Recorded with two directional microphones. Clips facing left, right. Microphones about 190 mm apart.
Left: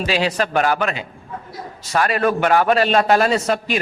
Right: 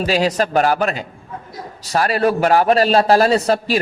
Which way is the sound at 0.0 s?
40° right (ahead or behind).